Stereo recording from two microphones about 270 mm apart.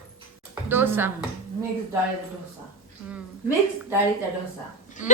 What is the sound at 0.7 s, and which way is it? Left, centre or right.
Speech, centre.